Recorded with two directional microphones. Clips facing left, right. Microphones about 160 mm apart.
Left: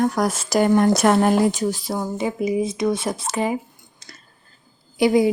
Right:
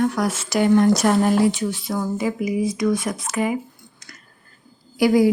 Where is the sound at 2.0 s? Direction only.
25° left (ahead or behind).